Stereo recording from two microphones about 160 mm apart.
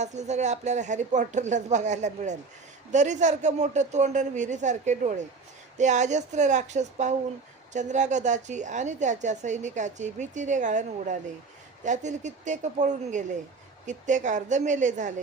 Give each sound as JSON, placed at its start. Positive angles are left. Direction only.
{"t": 0.0, "sound": "a woman's voice", "side_deg": -45}